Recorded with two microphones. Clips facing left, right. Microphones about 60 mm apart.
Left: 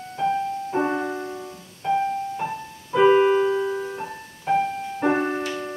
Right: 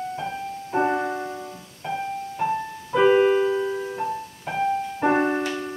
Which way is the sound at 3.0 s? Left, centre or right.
Centre.